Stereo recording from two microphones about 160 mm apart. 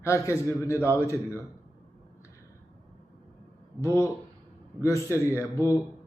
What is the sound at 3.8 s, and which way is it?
Speech, 20° left (ahead or behind).